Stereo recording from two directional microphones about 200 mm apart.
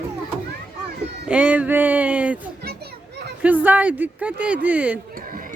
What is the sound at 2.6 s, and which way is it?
Children playing, 55° right (ahead or behind).